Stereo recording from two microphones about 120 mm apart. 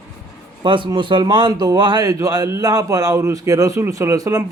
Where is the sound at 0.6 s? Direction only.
45° right (ahead or behind).